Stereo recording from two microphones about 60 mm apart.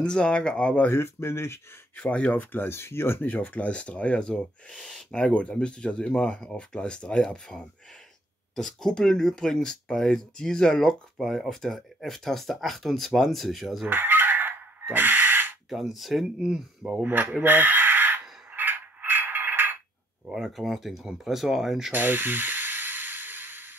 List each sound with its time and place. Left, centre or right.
0.0 s speech: centre
0.9 s speech: left
2.0 s speech: left
3.3 s speech: left; by 13.8 s centre
13.8 s chicken: right
15.7 s speech: centre
17.0 s speech: right
18.5 s a sound: right
20.3 s speech: centre
21.9 s a sound: right